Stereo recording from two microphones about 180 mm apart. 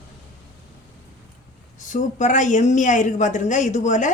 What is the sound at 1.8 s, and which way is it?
Speech, 45° left (ahead or behind).